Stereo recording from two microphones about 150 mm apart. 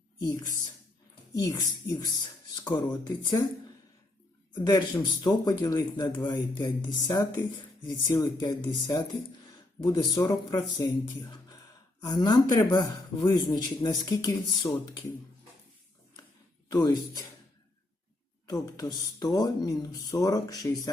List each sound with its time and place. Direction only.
0.2 s speech: 25° left (ahead or behind)
4.5 s speech: 25° left (ahead or behind)
16.6 s speech: 25° left (ahead or behind)
18.4 s speech: 25° left (ahead or behind)